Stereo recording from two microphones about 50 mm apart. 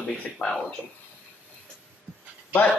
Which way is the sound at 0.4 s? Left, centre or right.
Centre.